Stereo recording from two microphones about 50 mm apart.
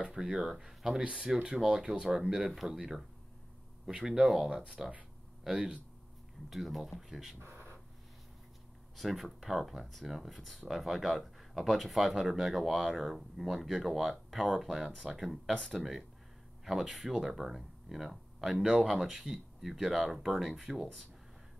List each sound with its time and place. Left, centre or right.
0.0 s speech: centre
1.2 s speech: right
1.7 s speech: centre
6.5 s speech: centre
7.4 s a sound: right
8.9 s speech: centre